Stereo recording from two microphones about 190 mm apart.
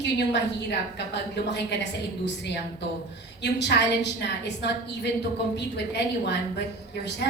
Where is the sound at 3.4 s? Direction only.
65° left (ahead or behind).